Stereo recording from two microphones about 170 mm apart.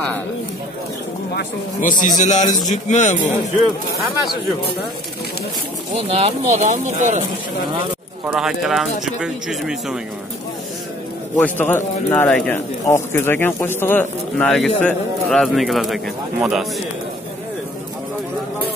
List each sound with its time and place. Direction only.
1.3 s a man's voice: 50° left (ahead or behind)
5.9 s speech: 35° right (ahead or behind)
8.3 s speech: 5° right (ahead or behind)
11.3 s speech: 10° left (ahead or behind)